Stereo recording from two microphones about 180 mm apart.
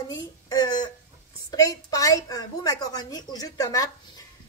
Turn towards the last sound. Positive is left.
turn(degrees=20)  # may be behind; listen again after turning